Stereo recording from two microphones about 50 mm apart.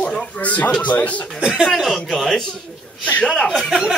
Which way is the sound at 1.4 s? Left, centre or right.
Centre.